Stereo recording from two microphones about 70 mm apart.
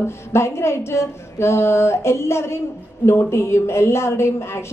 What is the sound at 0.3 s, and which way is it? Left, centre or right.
A woman's voice, left.